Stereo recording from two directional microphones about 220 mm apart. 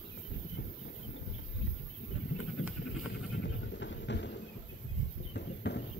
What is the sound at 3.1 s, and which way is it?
Goat, 50° left (ahead or behind).